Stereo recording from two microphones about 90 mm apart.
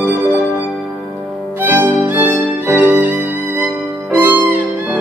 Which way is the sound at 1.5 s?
20° right (ahead or behind).